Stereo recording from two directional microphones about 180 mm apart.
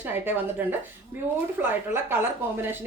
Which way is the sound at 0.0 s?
10° right (ahead or behind).